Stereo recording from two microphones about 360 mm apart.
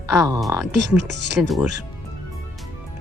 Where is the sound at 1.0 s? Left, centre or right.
Right.